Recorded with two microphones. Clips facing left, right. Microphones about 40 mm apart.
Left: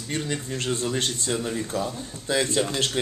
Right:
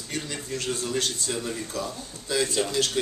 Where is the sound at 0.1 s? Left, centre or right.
Left.